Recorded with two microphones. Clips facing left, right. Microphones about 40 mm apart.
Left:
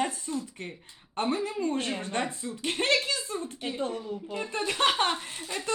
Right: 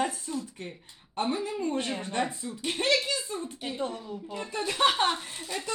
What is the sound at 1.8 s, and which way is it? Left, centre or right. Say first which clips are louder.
Speech: left 1 dB; centre.